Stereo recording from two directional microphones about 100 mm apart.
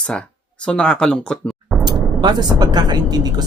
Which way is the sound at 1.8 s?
45° right (ahead or behind).